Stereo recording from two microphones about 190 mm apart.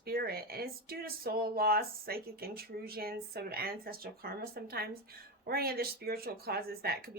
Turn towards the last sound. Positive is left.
turn(degrees=-55)  # may be behind; listen again after turning